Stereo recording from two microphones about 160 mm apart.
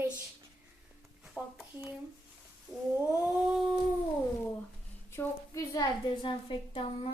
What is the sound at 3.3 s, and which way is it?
Child singing, 5° right (ahead or behind).